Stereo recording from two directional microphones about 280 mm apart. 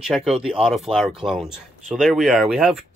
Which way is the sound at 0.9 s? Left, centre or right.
Centre.